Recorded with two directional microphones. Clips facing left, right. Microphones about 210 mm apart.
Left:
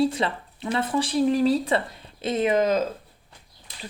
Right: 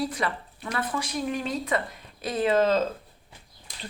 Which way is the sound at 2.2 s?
20° left (ahead or behind).